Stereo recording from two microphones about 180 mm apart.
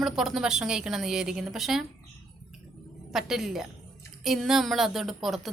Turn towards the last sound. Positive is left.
turn(degrees=0)  # may be behind; listen again after turning